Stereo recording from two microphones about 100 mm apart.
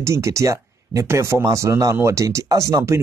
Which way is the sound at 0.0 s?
30° right (ahead or behind).